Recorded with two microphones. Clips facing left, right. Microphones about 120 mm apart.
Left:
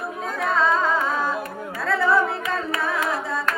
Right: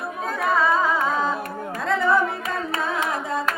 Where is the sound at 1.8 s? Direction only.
20° right (ahead or behind).